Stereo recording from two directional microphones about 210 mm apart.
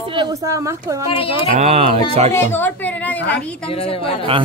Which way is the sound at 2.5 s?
10° left (ahead or behind).